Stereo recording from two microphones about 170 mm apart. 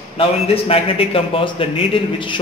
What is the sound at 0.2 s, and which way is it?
A man's voice, 35° left (ahead or behind).